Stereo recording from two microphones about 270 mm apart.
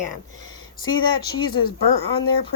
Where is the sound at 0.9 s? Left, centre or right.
Centre.